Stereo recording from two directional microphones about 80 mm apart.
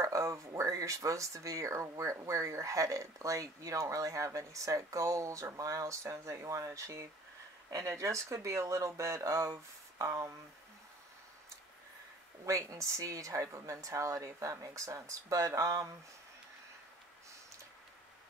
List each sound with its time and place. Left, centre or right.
0.0 s speech: right
12.4 s speech: right